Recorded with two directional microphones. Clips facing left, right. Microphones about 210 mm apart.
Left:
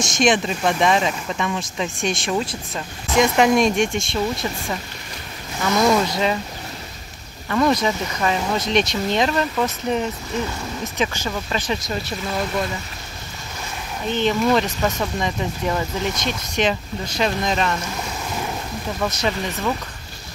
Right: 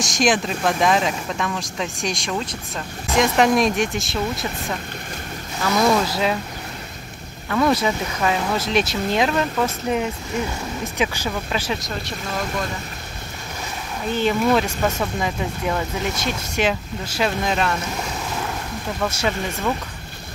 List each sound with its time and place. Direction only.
0.0 s speech: centre (ahead or behind)
7.4 s speech: centre (ahead or behind)
14.0 s speech: 5° right (ahead or behind)
18.9 s speech: 5° right (ahead or behind)